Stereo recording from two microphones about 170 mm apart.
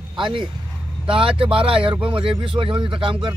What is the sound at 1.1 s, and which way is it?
Speech, 30° right (ahead or behind).